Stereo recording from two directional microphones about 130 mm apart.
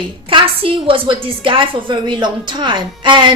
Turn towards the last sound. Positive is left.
turn(degrees=-35)  # may be behind; listen again after turning